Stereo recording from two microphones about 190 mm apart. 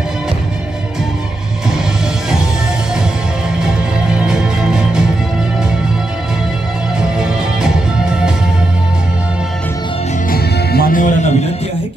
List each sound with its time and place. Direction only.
4.1 s music: 5° right (ahead or behind)
7.0 s music: 5° right (ahead or behind)
10.3 s music: 55° left (ahead or behind)